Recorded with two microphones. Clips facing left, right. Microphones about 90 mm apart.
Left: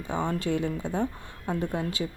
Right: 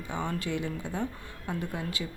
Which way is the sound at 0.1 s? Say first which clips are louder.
Left 5 dB; 30° left (ahead or behind).